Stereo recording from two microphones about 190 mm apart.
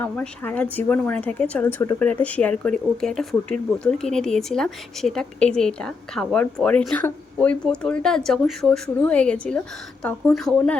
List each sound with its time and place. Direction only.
0.0 s speech: 10° left (ahead or behind)